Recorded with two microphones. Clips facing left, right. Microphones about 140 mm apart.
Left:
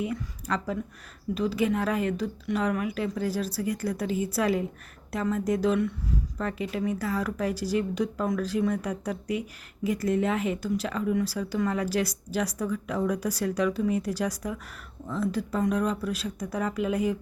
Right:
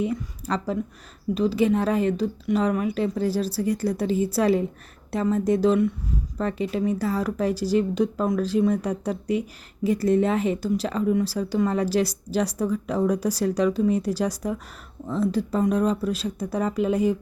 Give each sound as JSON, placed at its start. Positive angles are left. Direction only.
{"t": 0.0, "sound": "speech", "side_deg": -30}